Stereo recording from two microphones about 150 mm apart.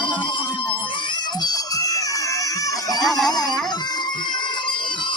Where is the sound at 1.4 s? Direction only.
25° left (ahead or behind).